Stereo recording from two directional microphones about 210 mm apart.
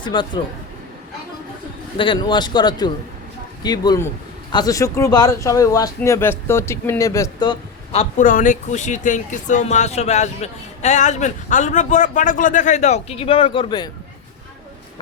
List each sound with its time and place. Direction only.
0.0 s speech: 20° left (ahead or behind)
2.0 s speech: 20° left (ahead or behind)
7.9 s speech: 40° left (ahead or behind); by 13.9 s 20° left (ahead or behind)